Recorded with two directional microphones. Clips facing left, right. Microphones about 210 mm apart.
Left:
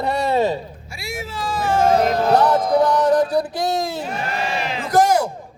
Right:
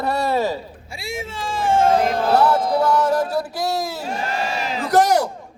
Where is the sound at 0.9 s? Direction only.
30° right (ahead or behind).